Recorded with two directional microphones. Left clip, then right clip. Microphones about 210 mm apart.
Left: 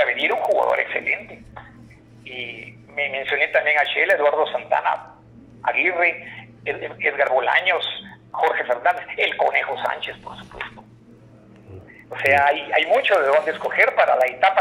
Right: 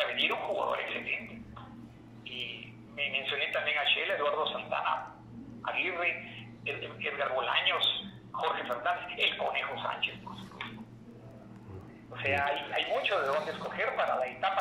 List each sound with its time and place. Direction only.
0.2 s radio: 35° left (ahead or behind)
2.3 s speech: 30° left (ahead or behind)
12.1 s speech: 30° left (ahead or behind)